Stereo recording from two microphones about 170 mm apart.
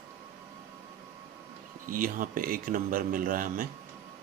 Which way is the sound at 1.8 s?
55° right (ahead or behind).